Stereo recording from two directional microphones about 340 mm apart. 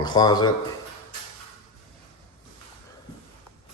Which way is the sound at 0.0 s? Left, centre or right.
Centre.